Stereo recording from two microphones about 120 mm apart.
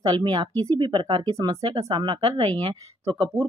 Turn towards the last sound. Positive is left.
turn(degrees=-30)  # may be behind; listen again after turning